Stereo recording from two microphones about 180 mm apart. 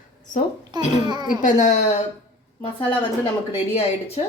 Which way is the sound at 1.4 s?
40° left (ahead or behind).